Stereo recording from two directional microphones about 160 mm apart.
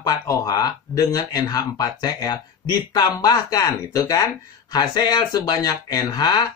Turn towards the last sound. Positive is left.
turn(degrees=25)  # may be behind; listen again after turning